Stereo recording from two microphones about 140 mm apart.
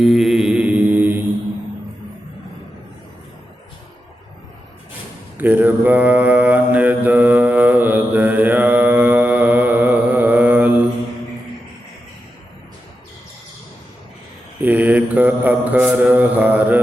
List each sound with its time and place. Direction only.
0.0 s mantra: centre (ahead or behind)
5.4 s mantra: 10° right (ahead or behind)
14.6 s mantra: 10° right (ahead or behind)